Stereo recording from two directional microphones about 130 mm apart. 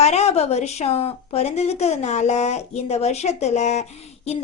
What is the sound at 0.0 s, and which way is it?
Speech, 55° left (ahead or behind).